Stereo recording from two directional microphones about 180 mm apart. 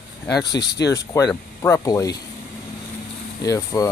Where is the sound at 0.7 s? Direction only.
20° left (ahead or behind).